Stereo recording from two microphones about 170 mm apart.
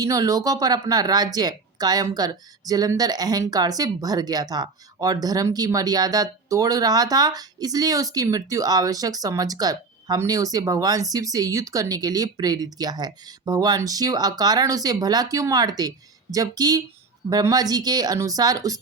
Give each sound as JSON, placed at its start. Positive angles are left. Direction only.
{"t": 0.0, "sound": "speech", "side_deg": -20}